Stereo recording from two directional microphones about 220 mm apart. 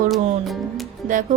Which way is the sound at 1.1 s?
35° right (ahead or behind).